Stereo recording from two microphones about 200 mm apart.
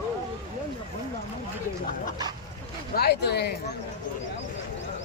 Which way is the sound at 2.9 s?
50° left (ahead or behind).